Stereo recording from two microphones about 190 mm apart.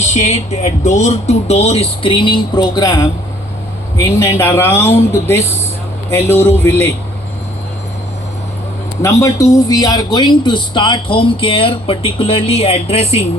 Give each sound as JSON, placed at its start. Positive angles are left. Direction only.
{"t": 0.0, "sound": "speech", "side_deg": 35}
{"t": 9.0, "sound": "speech", "side_deg": 15}